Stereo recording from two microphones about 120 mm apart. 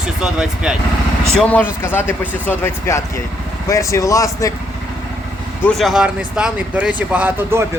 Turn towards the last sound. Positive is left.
turn(degrees=-15)  # may be behind; listen again after turning